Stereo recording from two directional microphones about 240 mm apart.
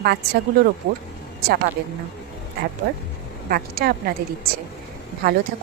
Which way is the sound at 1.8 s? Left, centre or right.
Right.